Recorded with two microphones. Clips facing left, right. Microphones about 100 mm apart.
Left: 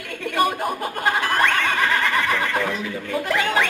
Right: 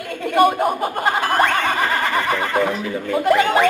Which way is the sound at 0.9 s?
45° right (ahead or behind).